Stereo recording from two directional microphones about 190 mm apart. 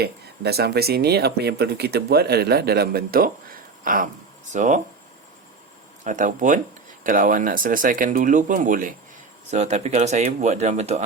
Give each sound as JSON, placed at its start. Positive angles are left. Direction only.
{"t": 0.0, "sound": "speech", "side_deg": -60}
{"t": 6.1, "sound": "speech", "side_deg": -40}